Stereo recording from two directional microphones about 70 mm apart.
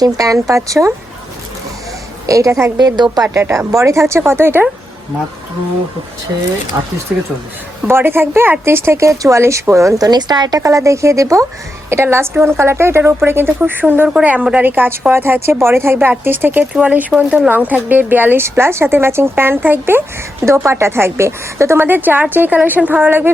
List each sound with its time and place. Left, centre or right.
0.0 s speech: right
2.2 s a woman's voice: right
2.7 s speech: right
3.4 s speech: right
3.7 s speech: right
7.9 s speech: right
10.1 s speech: right
10.6 s a woman's voice: right
14.1 s a woman's voice: centre
20.4 s speech: right
21.8 s a woman's voice: right